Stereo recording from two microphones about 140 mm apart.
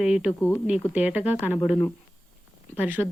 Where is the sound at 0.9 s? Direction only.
10° right (ahead or behind).